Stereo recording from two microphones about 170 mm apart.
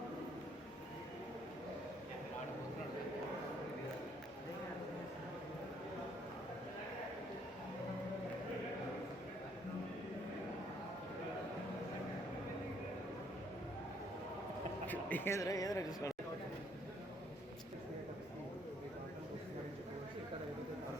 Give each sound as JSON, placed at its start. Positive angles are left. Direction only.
{"t": 14.8, "sound": "speech", "side_deg": 10}